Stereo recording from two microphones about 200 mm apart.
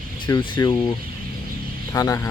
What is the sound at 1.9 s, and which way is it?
Speech, 15° left (ahead or behind).